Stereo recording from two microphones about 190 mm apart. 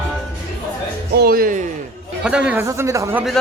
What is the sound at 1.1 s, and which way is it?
Speech, 55° right (ahead or behind).